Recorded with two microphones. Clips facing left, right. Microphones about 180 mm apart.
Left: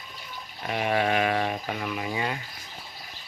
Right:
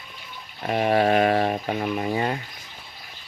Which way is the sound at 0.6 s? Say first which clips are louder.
Right 5 dB; 35° right (ahead or behind).